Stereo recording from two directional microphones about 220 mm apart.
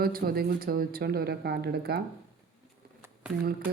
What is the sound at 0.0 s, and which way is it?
Speech, 40° right (ahead or behind).